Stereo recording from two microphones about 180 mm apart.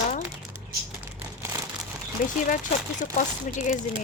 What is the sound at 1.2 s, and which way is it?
Crumpling, 15° right (ahead or behind).